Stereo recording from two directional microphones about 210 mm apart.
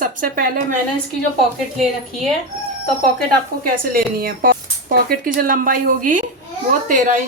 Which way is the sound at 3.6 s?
45° right (ahead or behind).